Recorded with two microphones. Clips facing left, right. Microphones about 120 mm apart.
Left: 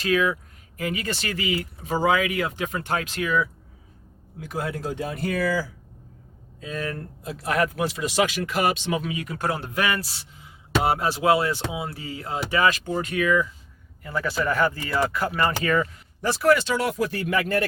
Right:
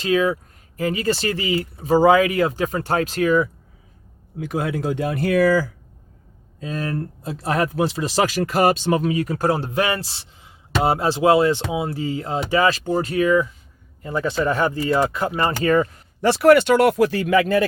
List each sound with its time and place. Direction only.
0.0 s speech: 25° right (ahead or behind)
4.4 s speech: 60° right (ahead or behind)
6.6 s speech: 35° right (ahead or behind)
16.2 s speech: 70° right (ahead or behind); by 17.3 s 90° right